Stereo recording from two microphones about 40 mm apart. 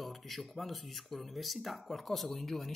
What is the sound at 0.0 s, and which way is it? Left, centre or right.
Speech, centre.